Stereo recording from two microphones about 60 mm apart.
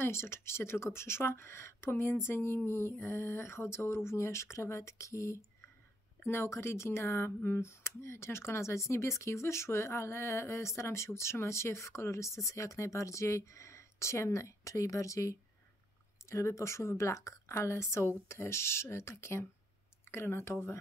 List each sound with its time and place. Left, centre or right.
0.0 s speech: left
6.2 s speech: left